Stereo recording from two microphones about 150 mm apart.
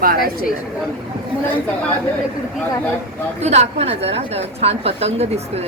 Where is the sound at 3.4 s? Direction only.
45° right (ahead or behind).